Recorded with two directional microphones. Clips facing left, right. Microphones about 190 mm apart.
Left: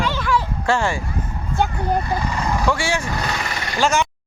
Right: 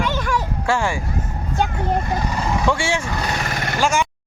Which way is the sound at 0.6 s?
10° right (ahead or behind).